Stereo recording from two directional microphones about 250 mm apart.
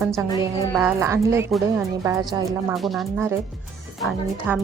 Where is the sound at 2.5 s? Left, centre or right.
Centre.